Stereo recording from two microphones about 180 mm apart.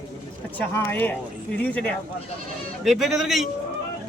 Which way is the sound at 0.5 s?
10° left (ahead or behind).